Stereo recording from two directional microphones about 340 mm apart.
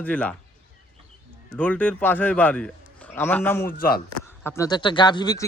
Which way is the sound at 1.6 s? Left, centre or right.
Centre.